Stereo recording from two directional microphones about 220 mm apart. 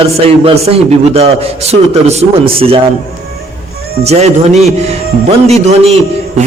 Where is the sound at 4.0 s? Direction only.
30° right (ahead or behind).